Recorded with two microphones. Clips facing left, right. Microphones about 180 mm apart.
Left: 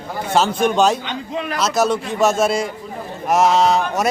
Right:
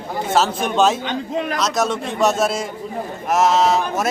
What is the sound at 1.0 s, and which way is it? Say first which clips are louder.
Speech: right 3 dB; 45° right (ahead or behind).